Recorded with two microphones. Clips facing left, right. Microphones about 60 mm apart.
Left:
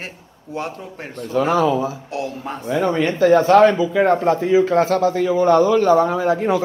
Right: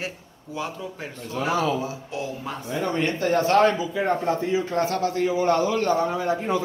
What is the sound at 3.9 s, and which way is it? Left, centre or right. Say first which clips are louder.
Speech: left 8 dB; left.